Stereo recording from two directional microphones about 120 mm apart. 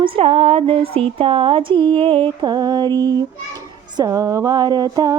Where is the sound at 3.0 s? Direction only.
35° right (ahead or behind).